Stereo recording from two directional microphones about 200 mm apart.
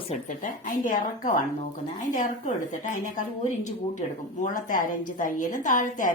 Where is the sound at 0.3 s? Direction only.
40° left (ahead or behind).